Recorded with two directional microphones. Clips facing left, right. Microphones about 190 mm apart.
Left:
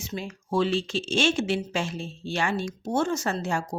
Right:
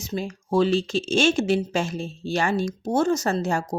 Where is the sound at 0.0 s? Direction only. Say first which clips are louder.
Right 5 dB; 40° right (ahead or behind).